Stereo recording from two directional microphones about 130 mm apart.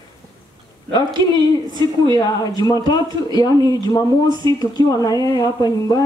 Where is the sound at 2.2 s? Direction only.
30° left (ahead or behind).